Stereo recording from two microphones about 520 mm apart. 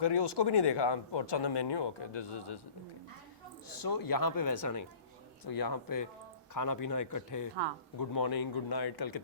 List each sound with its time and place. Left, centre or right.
0.0 s speech: left
3.7 s speech: left